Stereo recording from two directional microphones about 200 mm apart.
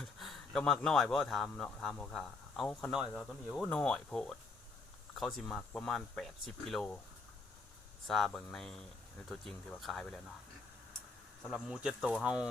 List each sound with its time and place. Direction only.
0.0 s speech: centre (ahead or behind)
8.0 s speech: centre (ahead or behind)
11.7 s speech: 5° right (ahead or behind)